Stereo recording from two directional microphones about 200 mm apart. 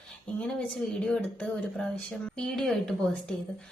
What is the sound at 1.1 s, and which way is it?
Speech, 5° left (ahead or behind).